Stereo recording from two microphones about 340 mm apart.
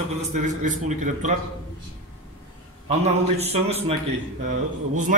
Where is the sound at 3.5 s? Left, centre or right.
Centre.